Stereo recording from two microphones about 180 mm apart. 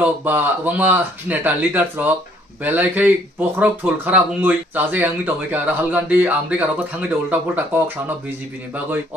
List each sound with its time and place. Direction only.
0.0 s speech: 10° right (ahead or behind)